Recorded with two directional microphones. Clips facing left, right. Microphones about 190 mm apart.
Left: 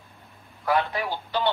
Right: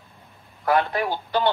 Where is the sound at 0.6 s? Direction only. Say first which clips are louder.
Right 3 dB; 50° right (ahead or behind).